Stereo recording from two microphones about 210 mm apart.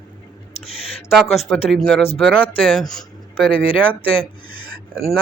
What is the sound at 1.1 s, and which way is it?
Speech, centre (ahead or behind).